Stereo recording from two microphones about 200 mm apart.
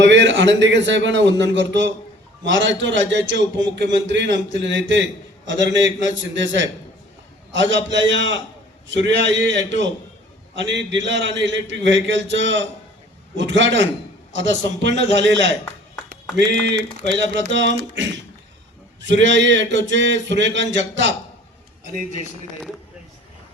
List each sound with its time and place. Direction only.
0.0 s a man's voice: 65° right (ahead or behind)